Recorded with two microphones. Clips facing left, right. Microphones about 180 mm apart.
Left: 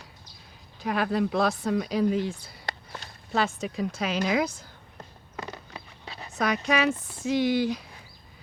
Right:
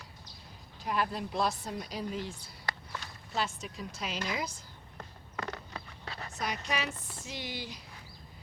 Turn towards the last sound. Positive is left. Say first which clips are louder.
# left 17 dB
turn(degrees=60)  # may be behind; listen again after turning